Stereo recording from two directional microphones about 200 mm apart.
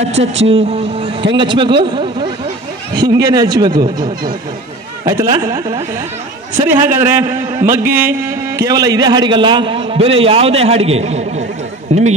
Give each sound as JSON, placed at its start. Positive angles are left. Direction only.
{"t": 0.1, "sound": "a man's voice", "side_deg": -30}